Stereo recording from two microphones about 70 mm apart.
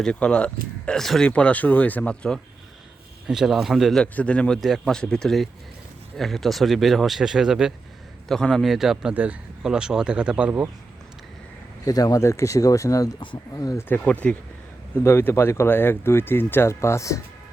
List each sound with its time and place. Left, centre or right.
0.0 s speech: centre
1.0 s speech: centre
1.3 s speech: centre
3.2 s speech: centre
4.0 s speech: centre
4.6 s speech: centre
8.3 s speech: centre
9.1 s speech: right
9.6 s speech: centre
11.9 s speech: left
13.7 s speech: left
14.0 s speech: centre
14.9 s speech: left